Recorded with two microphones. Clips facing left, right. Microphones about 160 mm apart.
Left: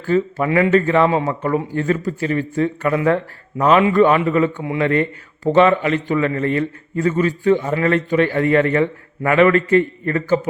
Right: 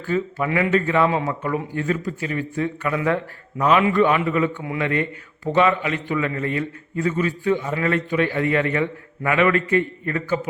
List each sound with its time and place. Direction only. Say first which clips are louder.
0.1 s speech: left 5 dB; 40° left (ahead or behind)
1.1 s speech: left 4 dB; 30° left (ahead or behind)
1.4 s a man's voice: left 5 dB; 45° left (ahead or behind)